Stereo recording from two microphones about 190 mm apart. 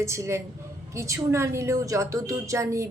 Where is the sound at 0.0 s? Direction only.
15° right (ahead or behind).